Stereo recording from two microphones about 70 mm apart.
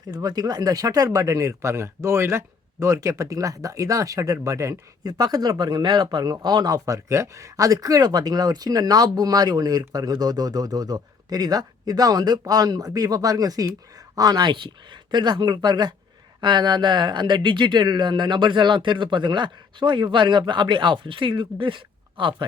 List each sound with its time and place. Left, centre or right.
0.2 s speech: right
14.2 s speech: right